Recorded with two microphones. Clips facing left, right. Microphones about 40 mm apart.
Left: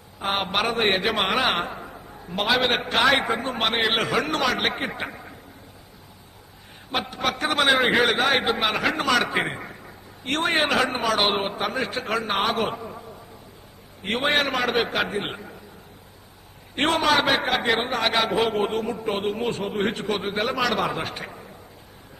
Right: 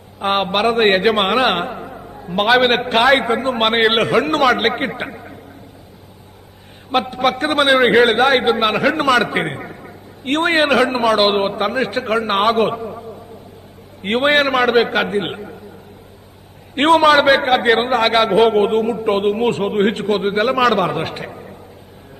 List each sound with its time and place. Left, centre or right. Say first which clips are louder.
0.2 s a man's voice: right 7 dB; right
0.8 s a man's voice: right 9 dB; right
1.7 s music: right 7 dB; right
2.3 s a man's voice: right 8 dB; right
5.0 s a man's voice: right 4 dB; centre
7.1 s a man's voice: right 8 dB; right
7.7 s a man's voice: right 8 dB; centre
8.0 s a man's voice: right 7 dB; right
12.7 s a sound: right 8 dB; right
14.0 s a man's voice: right 8 dB; right
16.7 s a man's voice: right 9 dB; right